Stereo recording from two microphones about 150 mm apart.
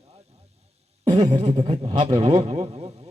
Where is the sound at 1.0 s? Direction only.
30° right (ahead or behind).